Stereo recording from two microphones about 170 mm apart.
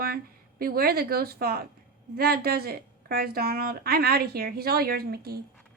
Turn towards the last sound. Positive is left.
turn(degrees=-65)  # may be behind; listen again after turning